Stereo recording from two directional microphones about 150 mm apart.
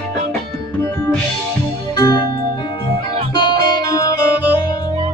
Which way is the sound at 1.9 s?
25° left (ahead or behind).